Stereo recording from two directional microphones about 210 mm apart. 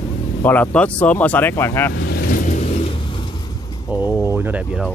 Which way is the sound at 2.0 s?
50° left (ahead or behind).